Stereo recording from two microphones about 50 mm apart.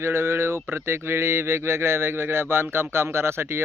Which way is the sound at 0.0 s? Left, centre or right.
Right.